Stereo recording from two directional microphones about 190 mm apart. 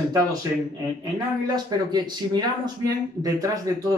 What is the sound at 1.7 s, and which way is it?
Speech, 20° right (ahead or behind).